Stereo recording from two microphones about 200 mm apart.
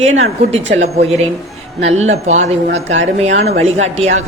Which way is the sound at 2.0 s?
35° right (ahead or behind).